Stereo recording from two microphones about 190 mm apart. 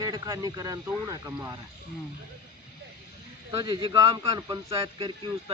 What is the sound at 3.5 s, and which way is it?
A man's voice, 20° right (ahead or behind).